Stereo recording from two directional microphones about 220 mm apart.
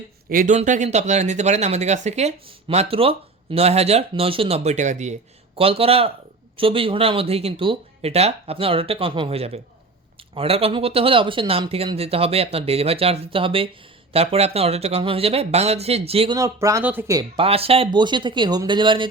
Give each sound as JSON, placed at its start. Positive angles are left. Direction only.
{"t": 0.3, "sound": "speech", "side_deg": -35}